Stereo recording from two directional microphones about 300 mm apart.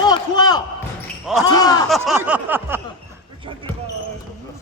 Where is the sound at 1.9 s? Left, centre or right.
Centre.